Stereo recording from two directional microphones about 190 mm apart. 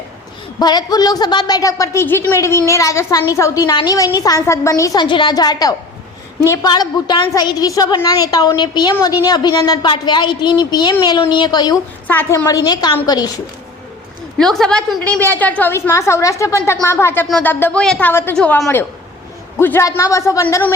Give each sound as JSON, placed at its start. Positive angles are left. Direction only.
{"t": 0.6, "sound": "a woman's voice", "side_deg": 20}
{"t": 12.0, "sound": "a woman's voice", "side_deg": 10}
{"t": 14.3, "sound": "a woman's voice", "side_deg": 0}